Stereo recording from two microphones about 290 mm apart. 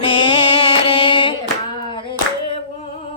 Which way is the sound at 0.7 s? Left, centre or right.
Centre.